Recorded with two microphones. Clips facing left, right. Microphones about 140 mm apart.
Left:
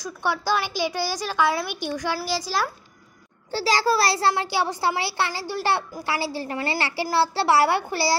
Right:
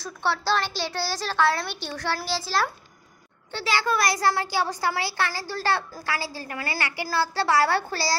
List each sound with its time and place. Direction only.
0.0 s a woman's voice: 10° left (ahead or behind)
3.5 s a child's voice: 35° left (ahead or behind); by 8.2 s 20° left (ahead or behind)